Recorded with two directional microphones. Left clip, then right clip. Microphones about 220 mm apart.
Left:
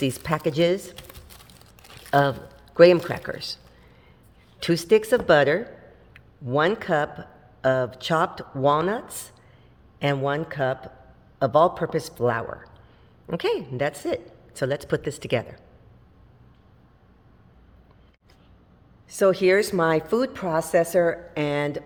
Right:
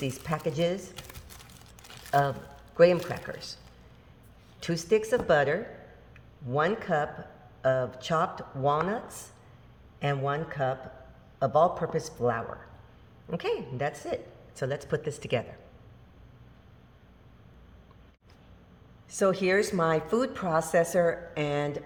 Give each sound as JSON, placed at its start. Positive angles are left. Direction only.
{"t": 0.0, "sound": "speech", "side_deg": 45}
{"t": 2.0, "sound": "speech", "side_deg": 45}
{"t": 4.6, "sound": "a man's voice", "side_deg": 45}
{"t": 19.0, "sound": "speech", "side_deg": 30}